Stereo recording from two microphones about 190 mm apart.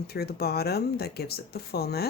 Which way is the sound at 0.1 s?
55° left (ahead or behind).